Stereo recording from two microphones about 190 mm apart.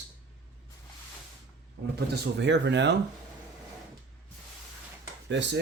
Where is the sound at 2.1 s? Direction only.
65° right (ahead or behind).